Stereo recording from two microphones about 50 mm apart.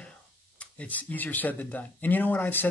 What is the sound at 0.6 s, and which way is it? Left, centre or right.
Speech, left.